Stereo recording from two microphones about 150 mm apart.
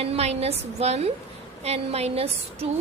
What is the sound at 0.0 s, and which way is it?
A woman's voice, 40° right (ahead or behind).